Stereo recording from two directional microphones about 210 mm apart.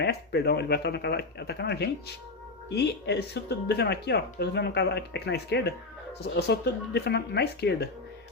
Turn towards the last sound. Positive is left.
turn(degrees=50)  # may be behind; listen again after turning